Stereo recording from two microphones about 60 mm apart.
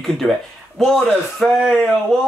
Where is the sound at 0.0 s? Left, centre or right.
Centre.